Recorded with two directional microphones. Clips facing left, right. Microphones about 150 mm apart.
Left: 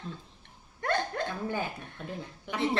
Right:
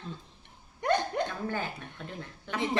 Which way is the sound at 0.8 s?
15° right (ahead or behind).